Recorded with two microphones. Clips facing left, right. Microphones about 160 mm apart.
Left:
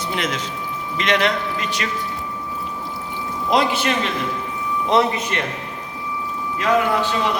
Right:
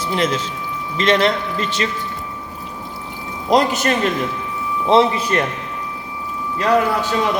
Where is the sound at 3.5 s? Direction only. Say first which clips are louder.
Right 3 dB; 45° right (ahead or behind).